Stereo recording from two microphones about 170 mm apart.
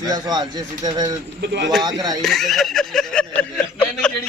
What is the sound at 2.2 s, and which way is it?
A man's voice, centre (ahead or behind).